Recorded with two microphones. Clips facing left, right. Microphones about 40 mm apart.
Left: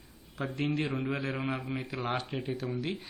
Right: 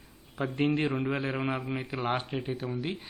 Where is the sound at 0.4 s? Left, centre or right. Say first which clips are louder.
Right 5 dB; right.